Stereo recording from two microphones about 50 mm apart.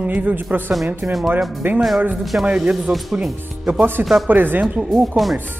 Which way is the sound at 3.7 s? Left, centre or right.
Right.